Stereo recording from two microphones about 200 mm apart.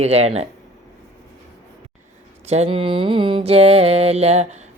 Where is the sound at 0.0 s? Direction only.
30° right (ahead or behind).